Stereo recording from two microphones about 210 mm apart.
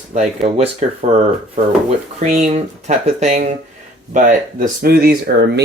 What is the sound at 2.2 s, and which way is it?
Speech, 30° right (ahead or behind).